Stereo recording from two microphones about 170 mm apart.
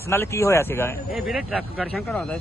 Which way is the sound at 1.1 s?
5° right (ahead or behind).